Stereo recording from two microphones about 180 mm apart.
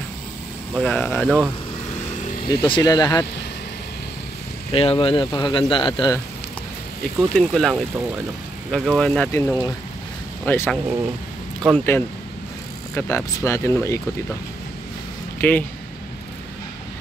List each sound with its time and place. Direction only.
0.7 s speech: 5° left (ahead or behind)
2.4 s speech: 25° left (ahead or behind)
4.7 s speech: 30° left (ahead or behind)
7.3 s speech: centre (ahead or behind)
15.4 s speech: 10° left (ahead or behind)